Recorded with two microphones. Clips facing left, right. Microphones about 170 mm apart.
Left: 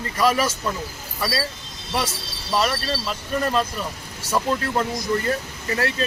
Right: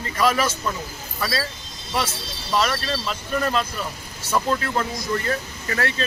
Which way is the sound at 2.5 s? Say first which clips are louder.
Even; 10° left (ahead or behind).